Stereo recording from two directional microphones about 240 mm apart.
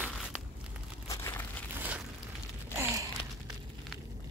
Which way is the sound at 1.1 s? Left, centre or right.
Centre.